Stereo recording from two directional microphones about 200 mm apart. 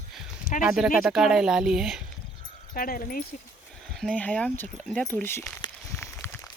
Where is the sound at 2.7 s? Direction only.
45° left (ahead or behind).